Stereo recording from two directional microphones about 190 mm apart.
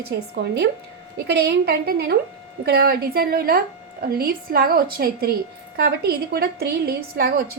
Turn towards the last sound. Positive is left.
turn(degrees=-50)  # may be behind; listen again after turning